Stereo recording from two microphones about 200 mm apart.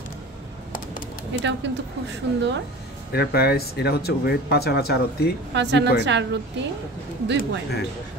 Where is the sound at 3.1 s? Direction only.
50° left (ahead or behind).